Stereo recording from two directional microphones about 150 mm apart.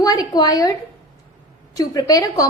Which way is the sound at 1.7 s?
25° left (ahead or behind).